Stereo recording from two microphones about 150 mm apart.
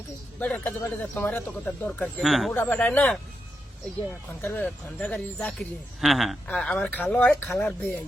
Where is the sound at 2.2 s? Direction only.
Centre (ahead or behind).